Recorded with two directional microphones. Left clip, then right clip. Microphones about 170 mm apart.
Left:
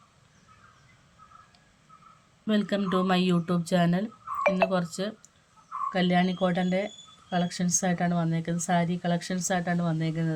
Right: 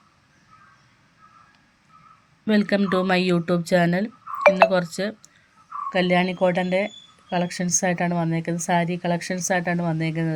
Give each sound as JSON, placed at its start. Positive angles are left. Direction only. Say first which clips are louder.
{"t": 2.5, "sound": "a woman's voice", "louder": "right 6 dB", "side_deg": -20}